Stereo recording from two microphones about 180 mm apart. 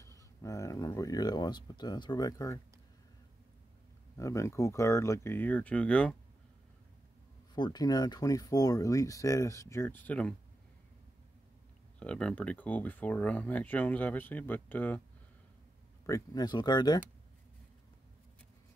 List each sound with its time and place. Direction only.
0.4 s speech: 15° left (ahead or behind)
4.2 s speech: 15° left (ahead or behind)
7.5 s speech: 25° left (ahead or behind); by 10.3 s 10° left (ahead or behind)
12.0 s speech: 5° left (ahead or behind)
16.1 s speech: 20° left (ahead or behind)